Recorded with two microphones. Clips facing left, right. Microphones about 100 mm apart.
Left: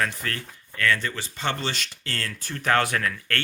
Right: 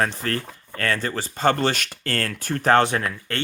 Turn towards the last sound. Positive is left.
turn(degrees=-25)  # may be behind; listen again after turning